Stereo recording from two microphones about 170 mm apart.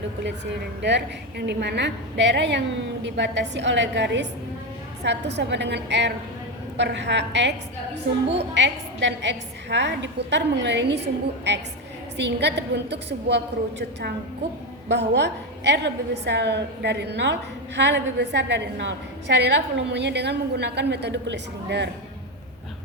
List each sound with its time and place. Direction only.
0.8 s a woman's voice: 90° right
8.5 s a woman's voice: 90° right
12.1 s a woman's voice: 90° right